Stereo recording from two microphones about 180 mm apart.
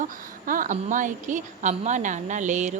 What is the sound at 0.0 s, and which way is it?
A woman's voice, 50° right (ahead or behind).